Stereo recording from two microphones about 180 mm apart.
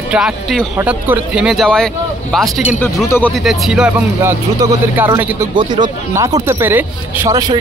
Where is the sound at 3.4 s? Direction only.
Centre (ahead or behind).